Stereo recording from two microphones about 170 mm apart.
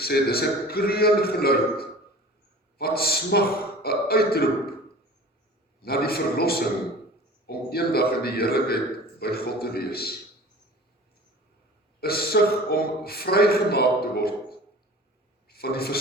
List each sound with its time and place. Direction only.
0.0 s a man's voice: 65° left (ahead or behind)
5.8 s a man's voice: 65° left (ahead or behind)
11.9 s a man's voice: 65° left (ahead or behind)
15.4 s a man's voice: 65° left (ahead or behind)